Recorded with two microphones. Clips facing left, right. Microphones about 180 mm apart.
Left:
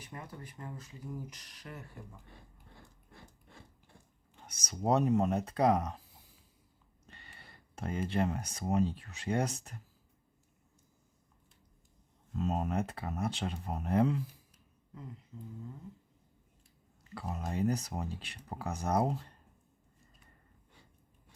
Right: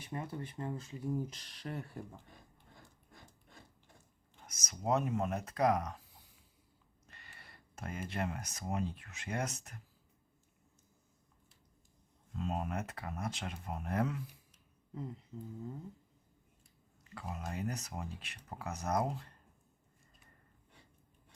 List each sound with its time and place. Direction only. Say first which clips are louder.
0.0 s speech: right 5 dB; 25° right (ahead or behind)
4.4 s speech: left 4 dB; 30° left (ahead or behind)
7.1 s a sound: left 3 dB; 30° left (ahead or behind)
8.9 s speech: left 7 dB; 35° left (ahead or behind)
12.4 s speech: left 5 dB; 40° left (ahead or behind)
17.2 s speech: left 6 dB; 35° left (ahead or behind)